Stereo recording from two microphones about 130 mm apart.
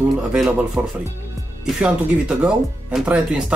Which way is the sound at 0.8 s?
15° right (ahead or behind).